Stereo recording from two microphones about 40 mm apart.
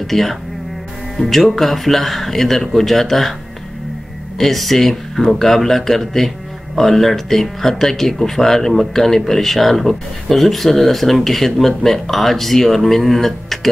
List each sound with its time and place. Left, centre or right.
0.0 s speech: centre
4.4 s speech: centre